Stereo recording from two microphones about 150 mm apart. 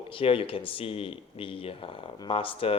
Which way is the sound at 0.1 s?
35° left (ahead or behind).